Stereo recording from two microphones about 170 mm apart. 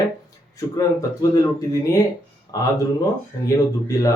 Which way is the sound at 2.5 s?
20° left (ahead or behind).